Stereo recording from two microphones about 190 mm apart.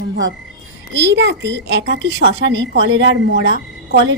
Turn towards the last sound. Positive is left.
turn(degrees=-70)  # may be behind; listen again after turning